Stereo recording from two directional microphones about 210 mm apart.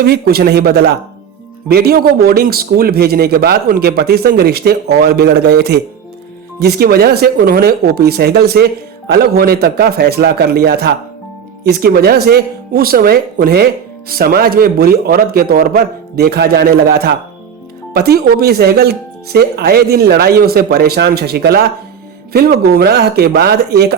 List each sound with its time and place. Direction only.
0.0 s speech: 50° right (ahead or behind)